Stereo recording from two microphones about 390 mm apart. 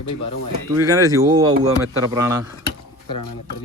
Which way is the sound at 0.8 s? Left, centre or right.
Centre.